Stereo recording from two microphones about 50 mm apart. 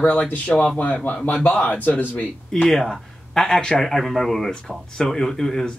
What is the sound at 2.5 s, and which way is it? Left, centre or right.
Speech, centre.